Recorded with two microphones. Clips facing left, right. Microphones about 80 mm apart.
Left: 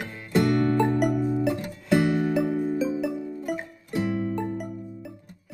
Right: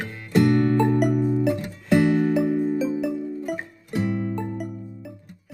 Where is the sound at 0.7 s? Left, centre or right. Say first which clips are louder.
Right 2 dB; centre.